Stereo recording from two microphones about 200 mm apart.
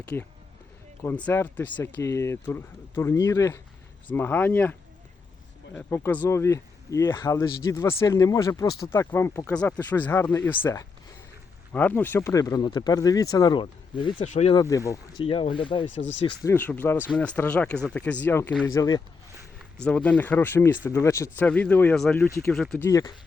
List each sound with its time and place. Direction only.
0.0 s speech: 5° left (ahead or behind)
5.7 s speech: 10° left (ahead or behind)
14.2 s speech: 35° left (ahead or behind)
14.5 s speech: 15° left (ahead or behind)
15.2 s speech: 25° left (ahead or behind)
16.0 s speech: 65° left (ahead or behind)
16.4 s speech: 10° left (ahead or behind)
19.8 s speech: 5° left (ahead or behind)
22.9 s speech: 15° left (ahead or behind)